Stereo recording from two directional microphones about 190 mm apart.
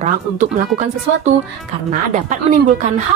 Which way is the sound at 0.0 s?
40° right (ahead or behind).